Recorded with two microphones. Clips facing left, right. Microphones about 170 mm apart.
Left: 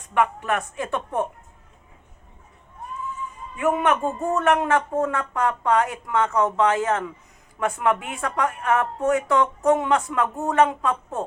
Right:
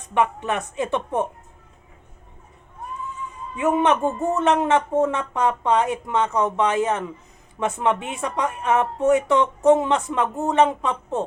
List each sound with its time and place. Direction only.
0.1 s a man's voice: 20° right (ahead or behind)
3.5 s a man's voice: 20° right (ahead or behind)